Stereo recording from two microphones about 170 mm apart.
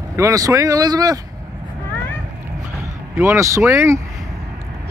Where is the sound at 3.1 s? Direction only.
15° right (ahead or behind).